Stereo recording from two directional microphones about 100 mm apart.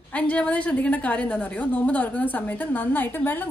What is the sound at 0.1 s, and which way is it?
A woman's voice, 15° left (ahead or behind).